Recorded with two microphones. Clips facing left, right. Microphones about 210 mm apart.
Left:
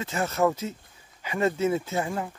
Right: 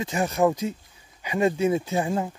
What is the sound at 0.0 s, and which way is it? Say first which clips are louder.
Speech: right 3 dB; 15° right (ahead or behind).